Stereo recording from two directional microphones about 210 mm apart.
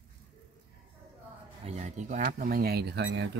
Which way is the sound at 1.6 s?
35° right (ahead or behind).